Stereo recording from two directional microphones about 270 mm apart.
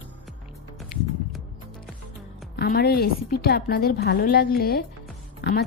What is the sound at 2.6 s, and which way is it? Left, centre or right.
A woman's voice, left.